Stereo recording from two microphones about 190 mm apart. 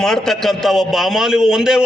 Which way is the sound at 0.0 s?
Centre (ahead or behind).